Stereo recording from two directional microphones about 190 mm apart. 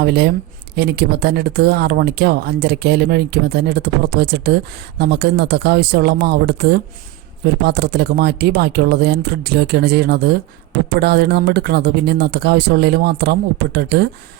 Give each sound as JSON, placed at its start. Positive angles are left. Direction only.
{"t": 0.0, "sound": "speech", "side_deg": -60}